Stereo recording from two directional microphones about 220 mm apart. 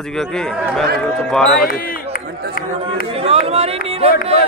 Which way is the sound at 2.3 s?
45° right (ahead or behind).